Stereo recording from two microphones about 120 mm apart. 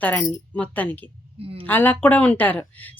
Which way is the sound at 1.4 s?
50° right (ahead or behind).